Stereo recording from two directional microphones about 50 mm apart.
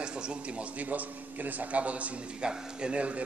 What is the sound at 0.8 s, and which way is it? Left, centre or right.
A man's voice, right.